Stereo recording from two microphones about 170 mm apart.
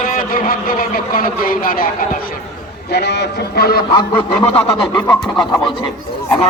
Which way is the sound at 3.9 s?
30° left (ahead or behind).